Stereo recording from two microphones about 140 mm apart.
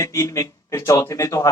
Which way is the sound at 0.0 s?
20° left (ahead or behind).